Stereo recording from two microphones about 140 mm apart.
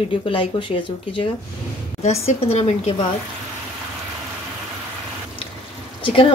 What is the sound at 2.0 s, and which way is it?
Speech, 50° left (ahead or behind).